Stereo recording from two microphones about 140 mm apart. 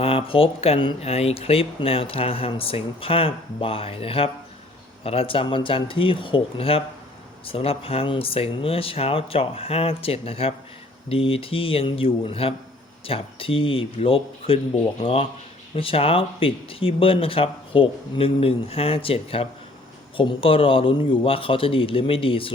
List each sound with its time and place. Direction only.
0.0 s speech: 40° left (ahead or behind)